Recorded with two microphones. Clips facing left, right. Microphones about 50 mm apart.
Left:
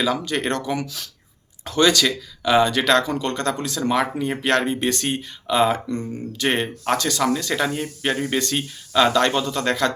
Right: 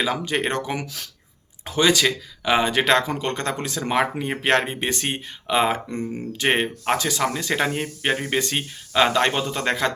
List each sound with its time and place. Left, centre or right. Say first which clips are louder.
0.0 s speech: left 1 dB; right
1.6 s speech: left 1 dB; centre